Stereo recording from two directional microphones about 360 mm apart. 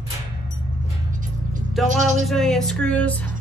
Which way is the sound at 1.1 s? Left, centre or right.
Right.